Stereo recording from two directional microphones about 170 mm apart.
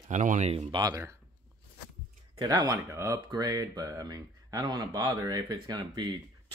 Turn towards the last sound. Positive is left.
turn(degrees=-25)  # may be behind; listen again after turning